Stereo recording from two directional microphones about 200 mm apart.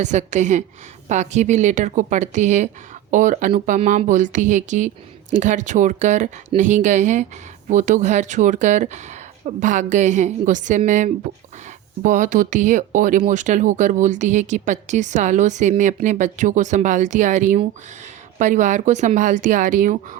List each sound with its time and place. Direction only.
0.0 s speech: 35° right (ahead or behind)